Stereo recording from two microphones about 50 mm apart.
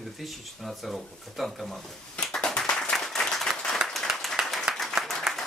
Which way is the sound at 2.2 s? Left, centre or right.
Centre.